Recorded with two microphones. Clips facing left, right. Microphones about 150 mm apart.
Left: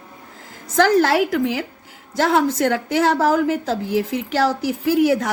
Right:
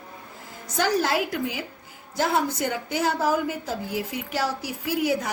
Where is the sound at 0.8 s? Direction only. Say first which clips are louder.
Left 8 dB; 90° left.